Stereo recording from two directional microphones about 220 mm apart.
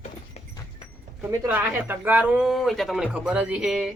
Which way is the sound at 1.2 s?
10° right (ahead or behind).